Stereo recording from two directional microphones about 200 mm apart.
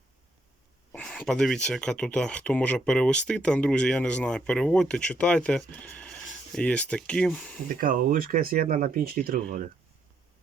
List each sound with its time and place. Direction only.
0.9 s speech: 5° left (ahead or behind)
7.8 s speech: 45° right (ahead or behind)